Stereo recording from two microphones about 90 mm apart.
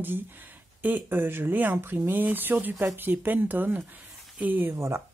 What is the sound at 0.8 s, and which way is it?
Speech, 20° right (ahead or behind).